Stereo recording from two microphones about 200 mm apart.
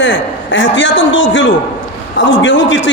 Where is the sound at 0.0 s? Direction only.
70° left (ahead or behind).